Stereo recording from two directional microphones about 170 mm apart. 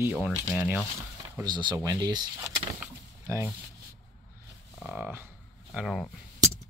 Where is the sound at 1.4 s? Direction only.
25° right (ahead or behind).